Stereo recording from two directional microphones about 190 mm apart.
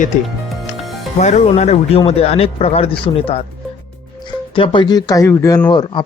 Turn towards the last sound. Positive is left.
turn(degrees=20)  # may be behind; listen again after turning